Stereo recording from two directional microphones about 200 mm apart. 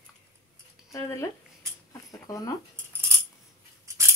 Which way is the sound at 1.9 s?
15° left (ahead or behind).